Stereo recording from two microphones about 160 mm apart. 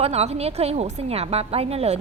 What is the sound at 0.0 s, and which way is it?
A woman's voice, 40° right (ahead or behind).